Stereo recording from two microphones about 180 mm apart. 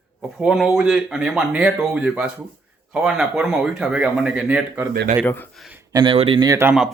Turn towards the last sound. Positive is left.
turn(degrees=-15)  # may be behind; listen again after turning